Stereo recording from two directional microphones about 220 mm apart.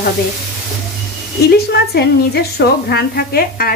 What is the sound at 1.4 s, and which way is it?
A woman's voice, 45° left (ahead or behind).